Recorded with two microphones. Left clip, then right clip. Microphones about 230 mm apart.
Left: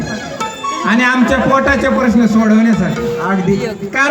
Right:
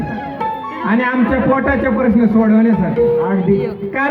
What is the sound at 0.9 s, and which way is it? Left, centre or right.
A man's voice, left.